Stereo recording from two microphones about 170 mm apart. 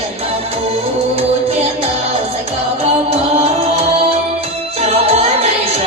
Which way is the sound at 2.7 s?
35° right (ahead or behind).